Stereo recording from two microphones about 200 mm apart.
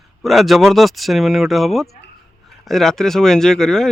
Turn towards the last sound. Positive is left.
turn(degrees=0)  # may be behind; listen again after turning